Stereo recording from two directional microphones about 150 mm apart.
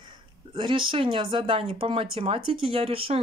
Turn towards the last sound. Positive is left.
turn(degrees=-40)  # may be behind; listen again after turning